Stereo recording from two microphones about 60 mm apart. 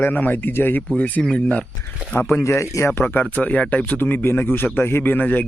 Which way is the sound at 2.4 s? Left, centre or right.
Left.